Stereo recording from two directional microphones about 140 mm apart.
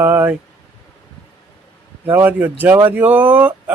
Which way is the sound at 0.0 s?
15° right (ahead or behind).